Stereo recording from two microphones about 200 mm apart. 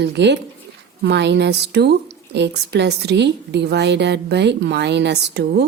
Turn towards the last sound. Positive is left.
turn(degrees=-55)  # may be behind; listen again after turning